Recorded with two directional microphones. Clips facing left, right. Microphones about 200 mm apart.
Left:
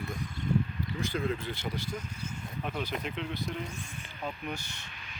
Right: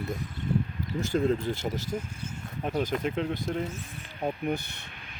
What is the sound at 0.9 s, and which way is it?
Speech, 45° right (ahead or behind).